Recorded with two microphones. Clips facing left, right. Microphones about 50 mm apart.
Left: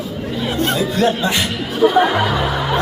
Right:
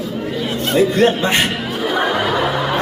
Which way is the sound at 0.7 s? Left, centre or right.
Right.